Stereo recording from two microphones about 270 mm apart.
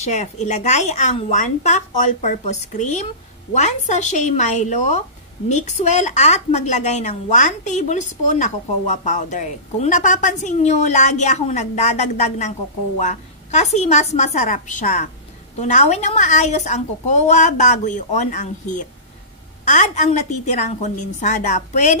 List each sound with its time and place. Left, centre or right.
0.0 s a woman's voice: left